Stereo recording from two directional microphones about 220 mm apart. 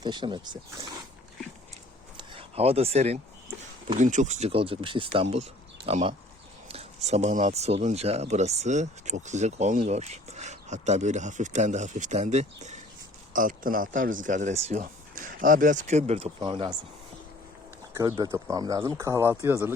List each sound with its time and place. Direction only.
0.0 s speech: 20° right (ahead or behind)
2.1 s a sound: 25° right (ahead or behind)
3.9 s speech: 35° right (ahead or behind)
17.9 s speech: 15° right (ahead or behind)